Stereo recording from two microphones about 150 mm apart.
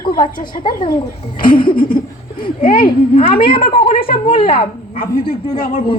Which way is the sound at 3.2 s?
35° left (ahead or behind).